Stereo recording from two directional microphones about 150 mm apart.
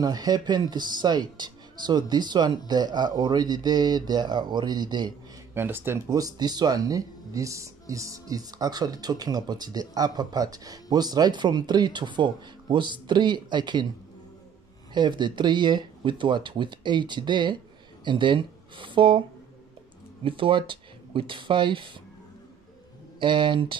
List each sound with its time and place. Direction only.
0.0 s speech: 25° right (ahead or behind)
5.5 s speech: 15° right (ahead or behind); by 13.9 s 30° right (ahead or behind)
15.0 s speech: 30° right (ahead or behind)
20.2 s speech: 35° right (ahead or behind)
23.1 s speech: 30° right (ahead or behind)